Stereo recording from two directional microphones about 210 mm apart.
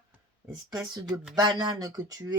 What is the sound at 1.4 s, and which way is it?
Speech, 20° right (ahead or behind).